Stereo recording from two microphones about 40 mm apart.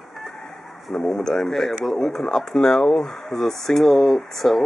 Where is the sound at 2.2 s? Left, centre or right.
Centre.